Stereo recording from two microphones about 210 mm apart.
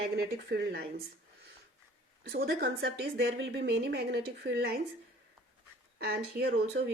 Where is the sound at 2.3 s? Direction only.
50° right (ahead or behind).